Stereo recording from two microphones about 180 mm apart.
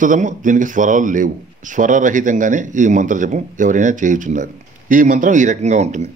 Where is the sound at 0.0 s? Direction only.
45° right (ahead or behind).